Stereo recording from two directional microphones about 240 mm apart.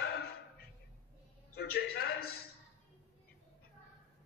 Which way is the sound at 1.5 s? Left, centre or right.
Left.